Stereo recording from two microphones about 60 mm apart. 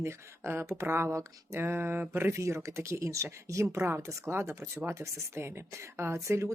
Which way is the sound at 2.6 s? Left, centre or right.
Right.